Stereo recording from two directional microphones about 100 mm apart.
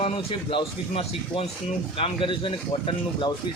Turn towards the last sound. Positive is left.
turn(degrees=55)  # may be behind; listen again after turning